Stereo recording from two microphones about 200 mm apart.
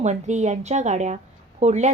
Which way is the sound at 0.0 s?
35° right (ahead or behind).